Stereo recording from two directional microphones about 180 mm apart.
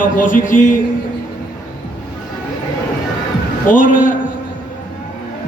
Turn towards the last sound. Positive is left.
turn(degrees=45)  # may be behind; listen again after turning